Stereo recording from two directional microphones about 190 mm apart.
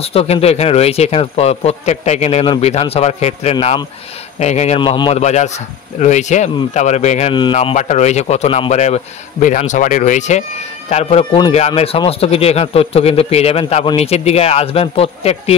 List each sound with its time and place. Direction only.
0.0 s a man's voice: 30° left (ahead or behind)